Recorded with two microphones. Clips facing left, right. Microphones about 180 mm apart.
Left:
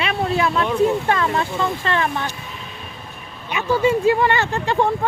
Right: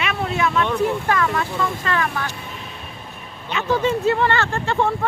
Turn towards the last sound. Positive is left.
turn(degrees=15)  # may be behind; listen again after turning